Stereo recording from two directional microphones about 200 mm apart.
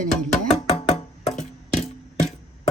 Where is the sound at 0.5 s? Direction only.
30° left (ahead or behind).